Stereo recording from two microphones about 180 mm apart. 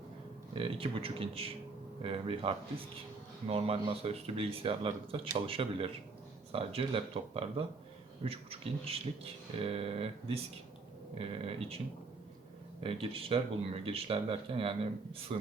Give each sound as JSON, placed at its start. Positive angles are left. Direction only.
{"t": 0.5, "sound": "a man's voice", "side_deg": -30}
{"t": 12.8, "sound": "speech", "side_deg": -30}